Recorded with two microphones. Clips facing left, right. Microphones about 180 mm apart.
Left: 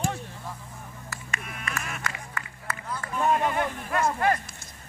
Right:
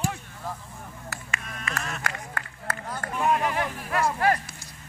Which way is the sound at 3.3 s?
Centre (ahead or behind).